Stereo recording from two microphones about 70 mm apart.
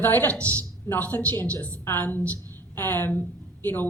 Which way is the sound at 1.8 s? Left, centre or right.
Left.